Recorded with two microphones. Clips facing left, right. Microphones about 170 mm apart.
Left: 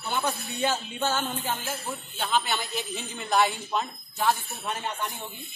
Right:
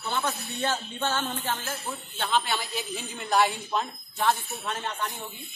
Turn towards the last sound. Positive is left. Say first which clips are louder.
# even
turn(degrees=10)  # may be behind; listen again after turning